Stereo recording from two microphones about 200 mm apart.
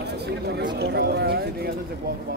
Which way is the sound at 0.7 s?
55° right (ahead or behind).